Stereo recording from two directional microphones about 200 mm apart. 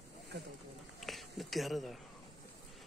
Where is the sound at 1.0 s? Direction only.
Centre (ahead or behind).